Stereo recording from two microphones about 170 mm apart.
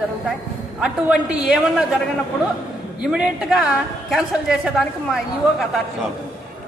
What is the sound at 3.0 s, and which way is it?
A man's voice, 5° right (ahead or behind).